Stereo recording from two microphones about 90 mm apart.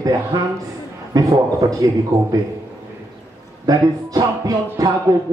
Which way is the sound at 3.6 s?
45° right (ahead or behind).